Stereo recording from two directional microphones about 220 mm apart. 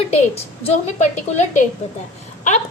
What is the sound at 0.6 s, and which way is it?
A woman's voice, 30° left (ahead or behind).